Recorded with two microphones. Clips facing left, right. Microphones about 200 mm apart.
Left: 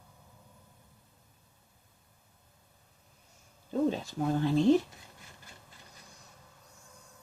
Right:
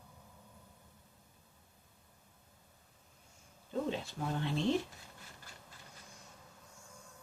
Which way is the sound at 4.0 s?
40° left (ahead or behind).